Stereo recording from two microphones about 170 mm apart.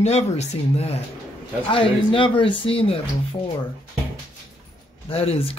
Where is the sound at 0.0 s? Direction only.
40° left (ahead or behind).